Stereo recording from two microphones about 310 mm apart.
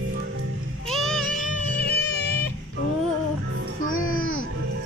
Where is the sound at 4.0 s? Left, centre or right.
Left.